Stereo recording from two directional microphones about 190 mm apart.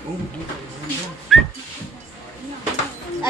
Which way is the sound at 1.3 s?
Centre (ahead or behind).